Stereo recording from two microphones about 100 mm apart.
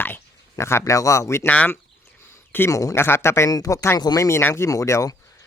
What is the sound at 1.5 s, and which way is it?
Speech, 15° left (ahead or behind).